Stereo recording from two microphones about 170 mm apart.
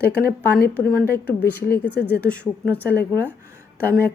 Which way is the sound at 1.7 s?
80° left.